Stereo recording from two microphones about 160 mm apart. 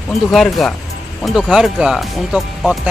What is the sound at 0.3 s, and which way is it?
Speech, centre (ahead or behind).